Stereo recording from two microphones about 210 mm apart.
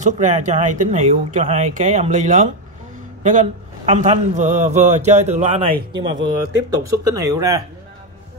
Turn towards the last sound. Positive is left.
turn(degrees=-15)  # may be behind; listen again after turning